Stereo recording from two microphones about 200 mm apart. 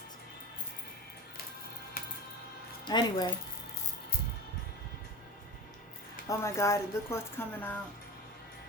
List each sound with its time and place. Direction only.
2.8 s speech: 20° left (ahead or behind)
6.2 s speech: 15° left (ahead or behind)